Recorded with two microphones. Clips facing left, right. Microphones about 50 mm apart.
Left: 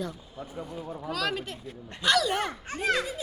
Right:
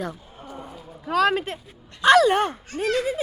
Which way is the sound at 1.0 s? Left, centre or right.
Right.